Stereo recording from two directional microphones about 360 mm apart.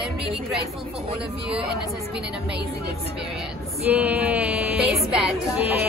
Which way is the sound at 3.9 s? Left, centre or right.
Centre.